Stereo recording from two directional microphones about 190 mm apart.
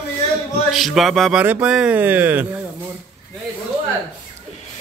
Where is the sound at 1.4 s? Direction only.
10° right (ahead or behind).